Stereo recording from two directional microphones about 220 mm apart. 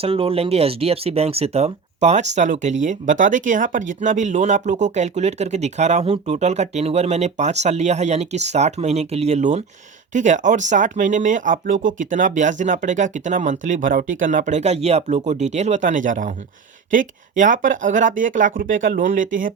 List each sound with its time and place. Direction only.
0.0 s speech: 25° right (ahead or behind)